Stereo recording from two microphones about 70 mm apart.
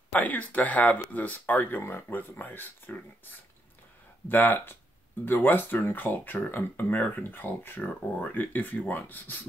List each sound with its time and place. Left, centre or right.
0.1 s speech: left